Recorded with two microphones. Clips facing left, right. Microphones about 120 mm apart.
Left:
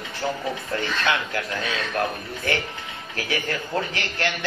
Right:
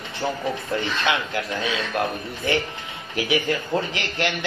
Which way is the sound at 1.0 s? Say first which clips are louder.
Right 1 dB; 20° right (ahead or behind).